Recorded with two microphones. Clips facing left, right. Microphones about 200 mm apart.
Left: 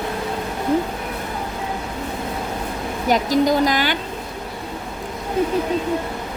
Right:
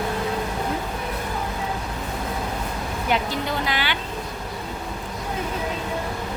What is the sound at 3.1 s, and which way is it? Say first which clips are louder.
Speech: left 9 dB; 40° left (ahead or behind).